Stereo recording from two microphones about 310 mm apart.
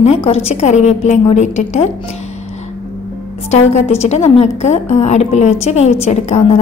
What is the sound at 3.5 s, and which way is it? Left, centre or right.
A woman's voice, left.